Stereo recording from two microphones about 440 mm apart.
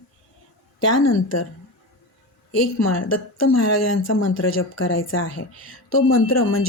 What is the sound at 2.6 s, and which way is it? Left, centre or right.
A woman's voice, left.